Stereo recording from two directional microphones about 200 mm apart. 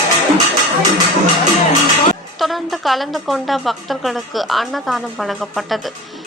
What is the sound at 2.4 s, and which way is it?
A woman's voice, centre (ahead or behind).